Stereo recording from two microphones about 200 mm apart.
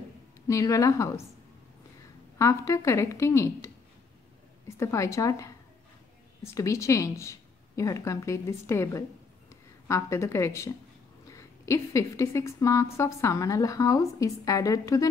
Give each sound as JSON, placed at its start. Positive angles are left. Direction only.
{"t": 0.5, "sound": "speech", "side_deg": 15}
{"t": 2.3, "sound": "a woman's voice", "side_deg": 15}